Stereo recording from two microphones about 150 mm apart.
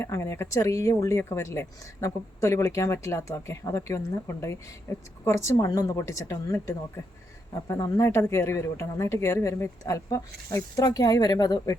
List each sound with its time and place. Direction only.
0.0 s speech: 20° left (ahead or behind)